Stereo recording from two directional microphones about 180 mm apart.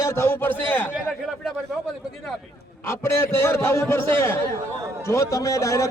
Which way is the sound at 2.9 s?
15° left (ahead or behind).